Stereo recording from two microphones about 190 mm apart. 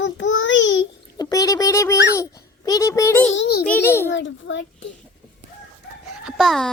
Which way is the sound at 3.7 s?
10° left (ahead or behind).